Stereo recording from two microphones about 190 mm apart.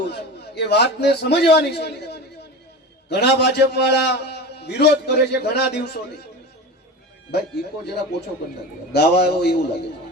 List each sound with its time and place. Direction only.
0.1 s a man's voice: 65° left (ahead or behind)
8.9 s a man's voice: 60° left (ahead or behind)